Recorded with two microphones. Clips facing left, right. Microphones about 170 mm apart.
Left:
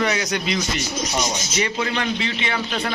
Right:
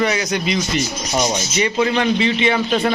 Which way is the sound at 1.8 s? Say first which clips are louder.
Right 7 dB; 15° right (ahead or behind).